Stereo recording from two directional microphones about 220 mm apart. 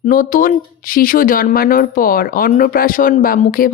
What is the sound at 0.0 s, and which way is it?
Speech, 40° left (ahead or behind).